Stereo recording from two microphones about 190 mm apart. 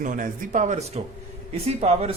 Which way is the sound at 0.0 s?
45° right (ahead or behind).